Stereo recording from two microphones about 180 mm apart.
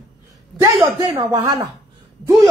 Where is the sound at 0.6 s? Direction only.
25° right (ahead or behind).